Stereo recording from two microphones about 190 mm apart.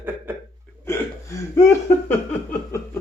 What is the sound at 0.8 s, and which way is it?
Hiccup, 15° left (ahead or behind).